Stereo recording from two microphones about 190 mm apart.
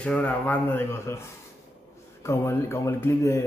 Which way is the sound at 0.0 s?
5° left (ahead or behind).